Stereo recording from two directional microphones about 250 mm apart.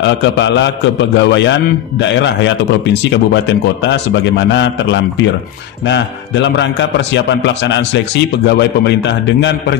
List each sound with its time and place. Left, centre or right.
0.0 s a man's voice: left